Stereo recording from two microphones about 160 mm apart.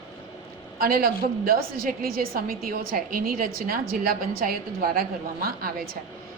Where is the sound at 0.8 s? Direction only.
65° right (ahead or behind).